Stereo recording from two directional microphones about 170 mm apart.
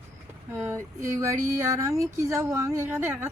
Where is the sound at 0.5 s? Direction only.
15° right (ahead or behind).